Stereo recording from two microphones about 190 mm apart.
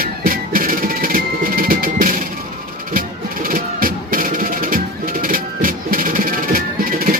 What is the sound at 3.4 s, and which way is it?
Music, 50° right (ahead or behind).